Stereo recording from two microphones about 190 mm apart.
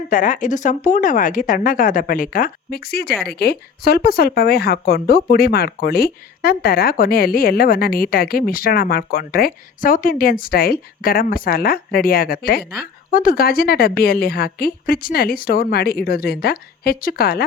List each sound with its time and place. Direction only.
0.1 s speech: 45° left (ahead or behind)